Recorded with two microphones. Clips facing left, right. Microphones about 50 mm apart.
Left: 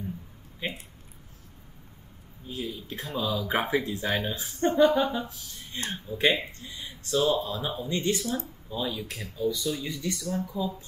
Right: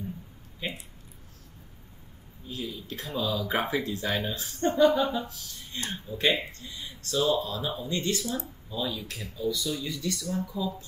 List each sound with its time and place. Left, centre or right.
0.6 s speech: centre
2.4 s speech: centre
10.1 s speech: centre